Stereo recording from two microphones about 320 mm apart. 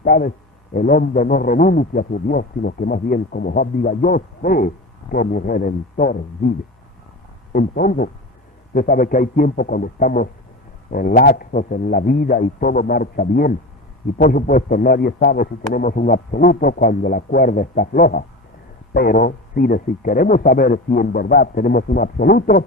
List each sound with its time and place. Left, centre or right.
0.0 s a man's voice: left
7.5 s a man's voice: left